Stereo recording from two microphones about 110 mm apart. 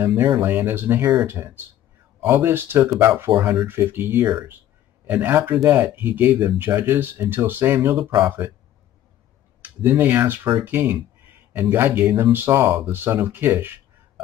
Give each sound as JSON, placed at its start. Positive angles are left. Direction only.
{"t": 0.0, "sound": "speech", "side_deg": -20}
{"t": 9.6, "sound": "speech", "side_deg": -15}